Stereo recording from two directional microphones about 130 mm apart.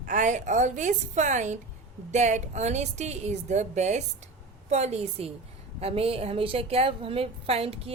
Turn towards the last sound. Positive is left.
turn(degrees=-50)  # may be behind; listen again after turning